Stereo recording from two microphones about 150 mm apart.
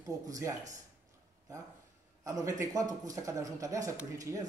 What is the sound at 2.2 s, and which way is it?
A man's voice, 20° right (ahead or behind).